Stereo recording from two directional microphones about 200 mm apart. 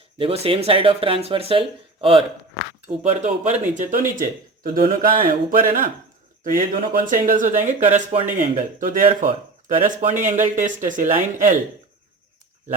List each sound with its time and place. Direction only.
0.2 s speech: 30° right (ahead or behind)